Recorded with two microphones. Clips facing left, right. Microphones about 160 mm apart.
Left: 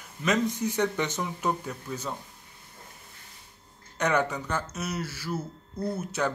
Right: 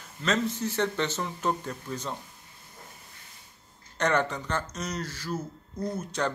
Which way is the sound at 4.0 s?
10° left (ahead or behind).